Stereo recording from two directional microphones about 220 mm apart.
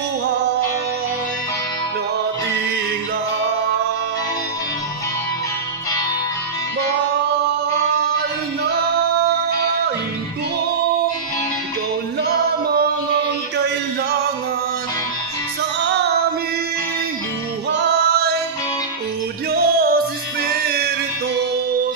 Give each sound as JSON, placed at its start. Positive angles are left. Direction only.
{"t": 12.2, "sound": "music", "side_deg": -45}
{"t": 17.6, "sound": "music", "side_deg": -50}
{"t": 19.5, "sound": "music", "side_deg": -40}